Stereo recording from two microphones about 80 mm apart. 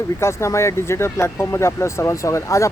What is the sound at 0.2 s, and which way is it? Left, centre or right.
Speech, left.